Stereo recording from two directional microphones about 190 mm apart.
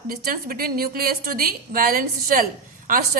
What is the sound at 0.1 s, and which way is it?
A woman's voice, 50° right (ahead or behind).